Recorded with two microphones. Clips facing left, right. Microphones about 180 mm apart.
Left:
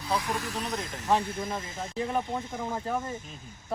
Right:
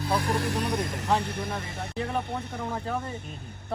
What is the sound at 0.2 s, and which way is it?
Speech, 65° right (ahead or behind).